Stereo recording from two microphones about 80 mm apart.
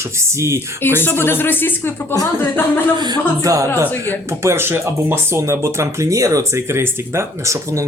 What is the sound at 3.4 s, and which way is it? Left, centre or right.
Speech, right.